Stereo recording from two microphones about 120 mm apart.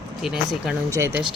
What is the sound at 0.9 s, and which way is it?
Speech, 25° right (ahead or behind).